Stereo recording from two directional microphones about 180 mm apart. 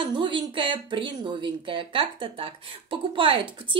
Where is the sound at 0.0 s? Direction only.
25° right (ahead or behind).